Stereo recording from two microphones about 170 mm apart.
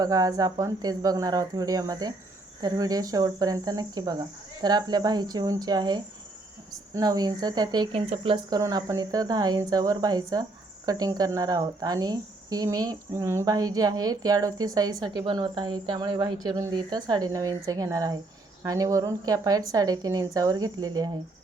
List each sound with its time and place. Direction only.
0.0 s speech: 20° right (ahead or behind)